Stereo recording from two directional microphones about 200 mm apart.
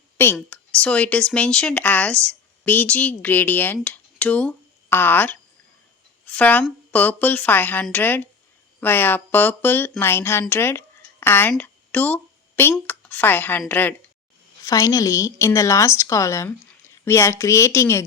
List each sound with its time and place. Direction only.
0.3 s a woman's voice: 5° left (ahead or behind)